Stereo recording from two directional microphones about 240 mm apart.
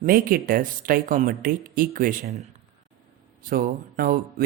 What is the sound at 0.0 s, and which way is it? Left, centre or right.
Speech, right.